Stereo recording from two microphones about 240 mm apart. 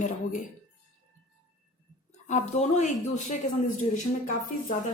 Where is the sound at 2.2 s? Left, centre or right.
Left.